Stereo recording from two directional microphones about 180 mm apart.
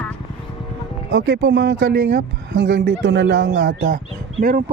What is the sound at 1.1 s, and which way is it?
Speech, 90° right.